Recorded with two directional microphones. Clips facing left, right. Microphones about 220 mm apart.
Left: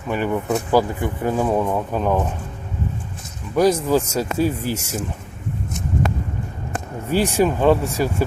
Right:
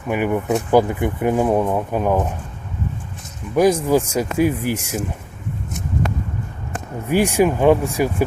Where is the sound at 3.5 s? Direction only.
15° right (ahead or behind).